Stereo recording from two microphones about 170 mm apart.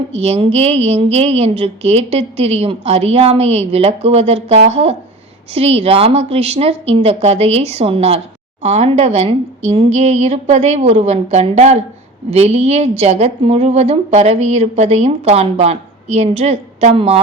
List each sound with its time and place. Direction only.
0.1 s a woman's voice: 35° right (ahead or behind)